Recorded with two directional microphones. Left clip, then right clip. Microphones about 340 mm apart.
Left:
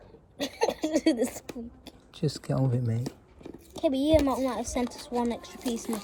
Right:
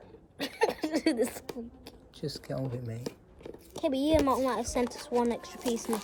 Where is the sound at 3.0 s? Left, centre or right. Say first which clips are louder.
Left 1 dB; centre.